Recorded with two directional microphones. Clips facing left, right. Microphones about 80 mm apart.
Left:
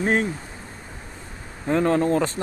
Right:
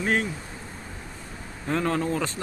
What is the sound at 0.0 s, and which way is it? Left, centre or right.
Speech, left.